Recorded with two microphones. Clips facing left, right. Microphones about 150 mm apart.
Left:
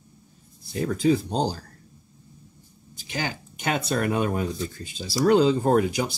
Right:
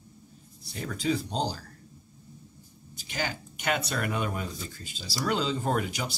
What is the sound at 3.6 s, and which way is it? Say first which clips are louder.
Speech: left 5 dB; 40° left (ahead or behind).